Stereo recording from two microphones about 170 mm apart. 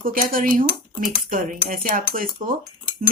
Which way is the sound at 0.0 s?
55° right (ahead or behind).